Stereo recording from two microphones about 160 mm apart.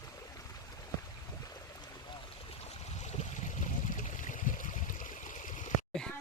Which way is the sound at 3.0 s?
50° left (ahead or behind).